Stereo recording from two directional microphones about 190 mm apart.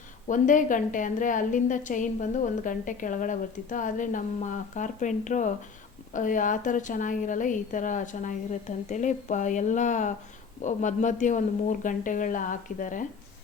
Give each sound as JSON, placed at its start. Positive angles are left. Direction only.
{"t": 0.3, "sound": "a woman's voice", "side_deg": 45}